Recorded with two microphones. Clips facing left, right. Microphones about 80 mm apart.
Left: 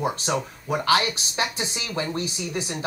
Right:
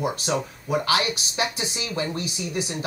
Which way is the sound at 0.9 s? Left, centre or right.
Left.